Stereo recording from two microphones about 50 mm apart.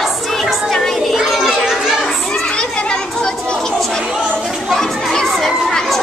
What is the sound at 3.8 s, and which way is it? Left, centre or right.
Chatter, centre.